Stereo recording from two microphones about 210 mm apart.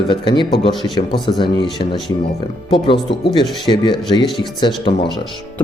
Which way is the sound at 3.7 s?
20° left (ahead or behind).